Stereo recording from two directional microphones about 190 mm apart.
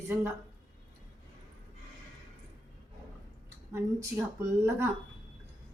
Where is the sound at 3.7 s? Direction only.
15° right (ahead or behind).